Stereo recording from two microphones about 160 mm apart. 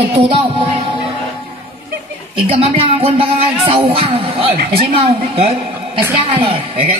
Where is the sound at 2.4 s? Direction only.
35° right (ahead or behind).